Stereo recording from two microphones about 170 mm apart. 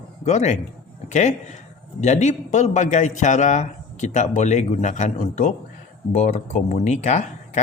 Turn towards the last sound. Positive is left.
turn(degrees=45)  # may be behind; listen again after turning